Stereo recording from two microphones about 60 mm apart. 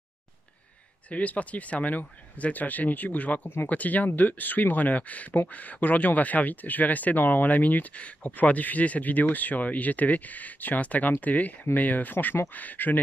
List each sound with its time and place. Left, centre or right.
1.1 s speech: left